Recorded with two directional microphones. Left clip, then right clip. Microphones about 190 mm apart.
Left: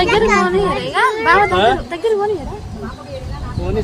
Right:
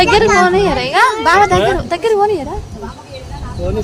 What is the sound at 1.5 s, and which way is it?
Speech, 30° right (ahead or behind).